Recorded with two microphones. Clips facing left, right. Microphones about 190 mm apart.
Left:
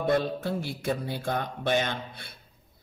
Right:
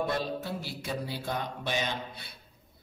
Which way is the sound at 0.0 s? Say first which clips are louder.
Left 5 dB; 55° left (ahead or behind).